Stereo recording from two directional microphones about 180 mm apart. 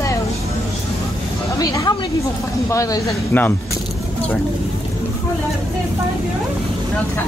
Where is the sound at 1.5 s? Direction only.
20° left (ahead or behind).